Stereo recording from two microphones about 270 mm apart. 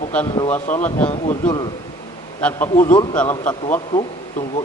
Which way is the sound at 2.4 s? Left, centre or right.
Centre.